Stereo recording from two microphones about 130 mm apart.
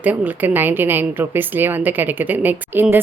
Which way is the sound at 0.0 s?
15° right (ahead or behind).